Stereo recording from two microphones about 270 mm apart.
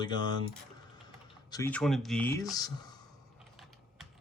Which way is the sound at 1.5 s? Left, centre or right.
Centre.